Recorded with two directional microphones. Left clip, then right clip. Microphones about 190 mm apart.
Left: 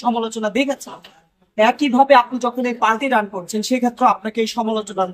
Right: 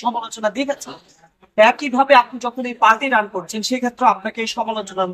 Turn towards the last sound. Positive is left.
turn(degrees=65)  # may be behind; listen again after turning